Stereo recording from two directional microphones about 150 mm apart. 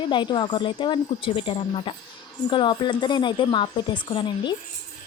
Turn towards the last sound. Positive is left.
turn(degrees=30)  # may be behind; listen again after turning